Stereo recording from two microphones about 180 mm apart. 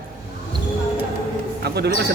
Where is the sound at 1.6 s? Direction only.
65° right (ahead or behind).